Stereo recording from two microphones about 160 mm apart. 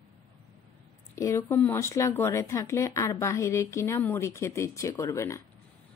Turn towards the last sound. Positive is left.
turn(degrees=15)  # may be behind; listen again after turning